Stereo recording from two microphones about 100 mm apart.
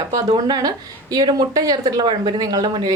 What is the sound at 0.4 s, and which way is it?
A woman's voice, 45° right (ahead or behind).